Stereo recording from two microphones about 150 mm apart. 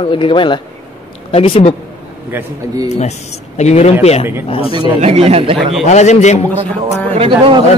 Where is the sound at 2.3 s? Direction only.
15° right (ahead or behind).